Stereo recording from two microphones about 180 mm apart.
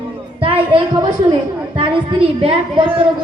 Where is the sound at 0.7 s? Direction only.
25° right (ahead or behind).